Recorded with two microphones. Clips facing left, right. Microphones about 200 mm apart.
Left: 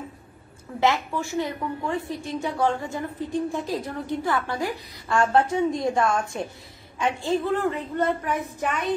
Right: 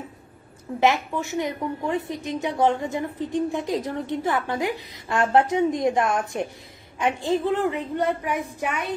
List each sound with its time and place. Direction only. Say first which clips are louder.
0.7 s a woman's voice: right 2 dB; 20° right (ahead or behind)